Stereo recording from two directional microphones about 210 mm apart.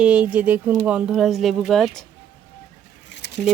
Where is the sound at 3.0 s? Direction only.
55° left (ahead or behind).